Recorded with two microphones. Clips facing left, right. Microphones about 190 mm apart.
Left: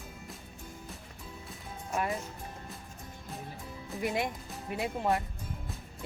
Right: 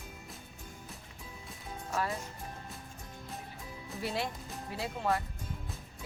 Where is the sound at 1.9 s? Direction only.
15° left (ahead or behind).